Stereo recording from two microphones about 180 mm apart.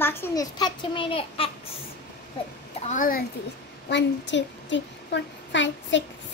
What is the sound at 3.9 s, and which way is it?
A child's voice, 85° left.